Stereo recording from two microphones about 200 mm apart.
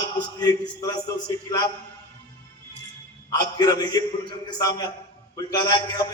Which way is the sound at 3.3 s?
20° left (ahead or behind).